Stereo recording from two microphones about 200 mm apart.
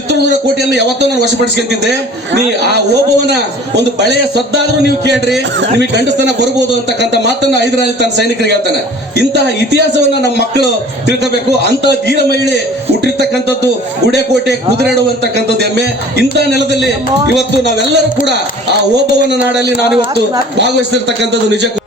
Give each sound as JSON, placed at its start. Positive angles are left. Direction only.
{"t": 3.2, "sound": "a man's voice", "side_deg": -55}
{"t": 11.2, "sound": "a man's voice", "side_deg": -60}
{"t": 14.1, "sound": "a man's voice", "side_deg": -60}
{"t": 19.3, "sound": "a man's voice", "side_deg": -60}